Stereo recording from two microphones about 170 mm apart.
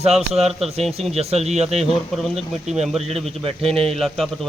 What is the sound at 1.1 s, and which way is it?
Speech, 40° right (ahead or behind).